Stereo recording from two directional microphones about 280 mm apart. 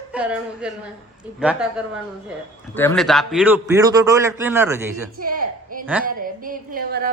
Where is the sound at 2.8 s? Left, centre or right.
Centre.